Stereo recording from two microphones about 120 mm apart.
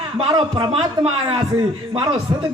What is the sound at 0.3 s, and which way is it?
Speech, 45° right (ahead or behind).